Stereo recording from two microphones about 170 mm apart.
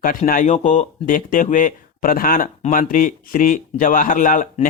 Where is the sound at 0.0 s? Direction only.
55° left (ahead or behind).